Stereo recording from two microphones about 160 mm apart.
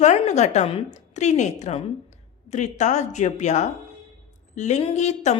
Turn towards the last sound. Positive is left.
turn(degrees=45)  # may be behind; listen again after turning